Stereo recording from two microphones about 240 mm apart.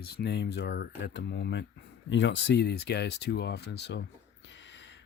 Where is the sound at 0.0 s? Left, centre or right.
Left.